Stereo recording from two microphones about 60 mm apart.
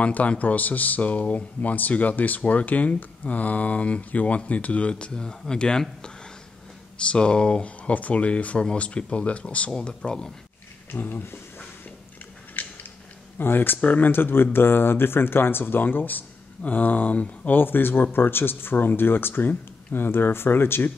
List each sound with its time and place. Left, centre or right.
0.0 s speech: left
10.9 s speech: left
12.6 s a sound: left
13.4 s speech: left